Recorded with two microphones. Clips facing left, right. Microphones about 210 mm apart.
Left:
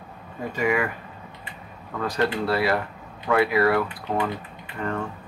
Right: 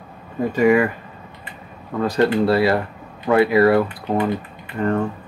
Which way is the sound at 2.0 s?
30° right (ahead or behind).